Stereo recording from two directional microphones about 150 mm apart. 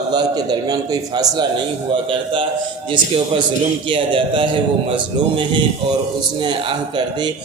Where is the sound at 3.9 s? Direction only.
35° right (ahead or behind).